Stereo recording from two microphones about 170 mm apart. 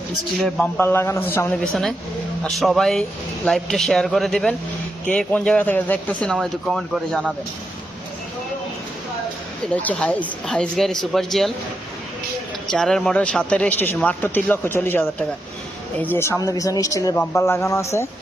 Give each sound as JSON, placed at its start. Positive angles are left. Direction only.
{"t": 0.3, "sound": "speech", "side_deg": 0}
{"t": 0.8, "sound": "speech", "side_deg": 15}
{"t": 1.6, "sound": "speech", "side_deg": 0}
{"t": 9.7, "sound": "speech", "side_deg": 10}
{"t": 12.7, "sound": "speech", "side_deg": 5}